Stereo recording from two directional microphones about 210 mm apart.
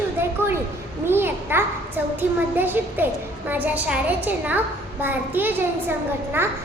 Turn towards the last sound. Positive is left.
turn(degrees=-10)  # may be behind; listen again after turning